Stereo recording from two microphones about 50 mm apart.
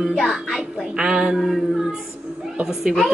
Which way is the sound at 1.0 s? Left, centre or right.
Centre.